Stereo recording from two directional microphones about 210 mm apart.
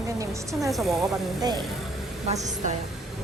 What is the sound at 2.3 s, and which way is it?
Speech, 35° right (ahead or behind).